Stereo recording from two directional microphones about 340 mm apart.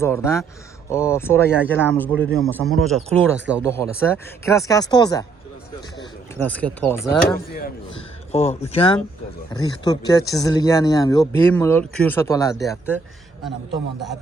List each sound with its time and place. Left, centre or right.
0.0 s speech: centre
3.6 s speech: centre
7.1 s speech: left; by 13.0 s centre